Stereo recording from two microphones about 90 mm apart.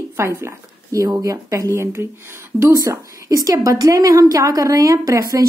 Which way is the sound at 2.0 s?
25° right (ahead or behind).